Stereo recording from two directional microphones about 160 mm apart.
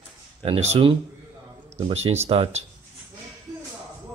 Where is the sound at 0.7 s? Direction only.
35° right (ahead or behind).